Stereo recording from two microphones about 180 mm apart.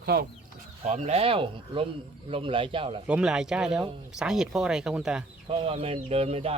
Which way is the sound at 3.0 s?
5° right (ahead or behind).